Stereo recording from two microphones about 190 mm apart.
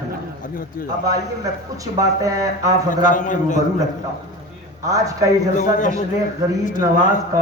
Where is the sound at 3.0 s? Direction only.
45° left (ahead or behind).